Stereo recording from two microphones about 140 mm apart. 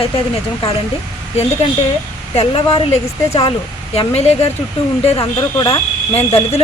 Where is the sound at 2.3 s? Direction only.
40° left (ahead or behind).